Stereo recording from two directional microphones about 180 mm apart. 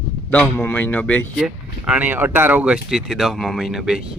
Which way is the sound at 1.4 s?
5° right (ahead or behind).